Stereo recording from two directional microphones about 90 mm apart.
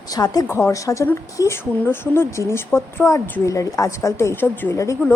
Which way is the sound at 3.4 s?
35° left (ahead or behind).